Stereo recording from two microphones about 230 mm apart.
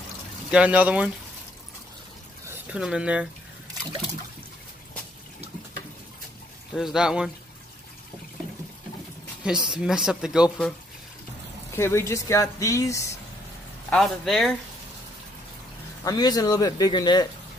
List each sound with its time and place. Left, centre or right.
0.5 s speech: centre
2.4 s speech: centre
6.7 s speech: centre
9.4 s speech: centre
11.7 s speech: centre
13.8 s speech: centre
16.0 s speech: centre